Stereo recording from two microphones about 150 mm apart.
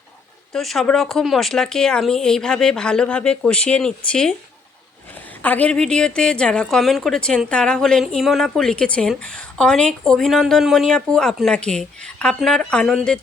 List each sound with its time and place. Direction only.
0.5 s a woman's voice: centre (ahead or behind)